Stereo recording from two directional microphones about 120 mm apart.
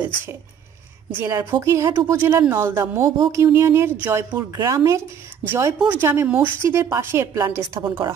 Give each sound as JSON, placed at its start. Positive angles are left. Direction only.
{"t": 1.2, "sound": "a woman's voice", "side_deg": -20}